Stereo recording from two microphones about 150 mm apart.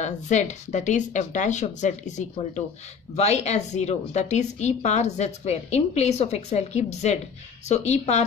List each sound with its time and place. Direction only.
0.0 s a woman's voice: 50° left (ahead or behind)